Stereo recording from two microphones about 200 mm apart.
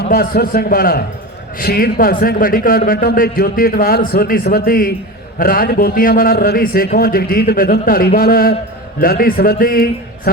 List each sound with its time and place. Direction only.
0.1 s a man's voice: 50° left (ahead or behind)